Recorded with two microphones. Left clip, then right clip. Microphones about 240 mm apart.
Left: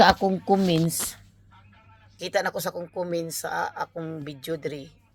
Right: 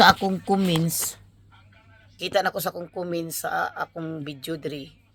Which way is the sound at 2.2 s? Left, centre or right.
Centre.